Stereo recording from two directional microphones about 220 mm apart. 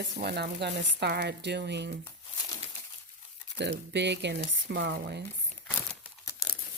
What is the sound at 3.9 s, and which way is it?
Speech, 50° right (ahead or behind).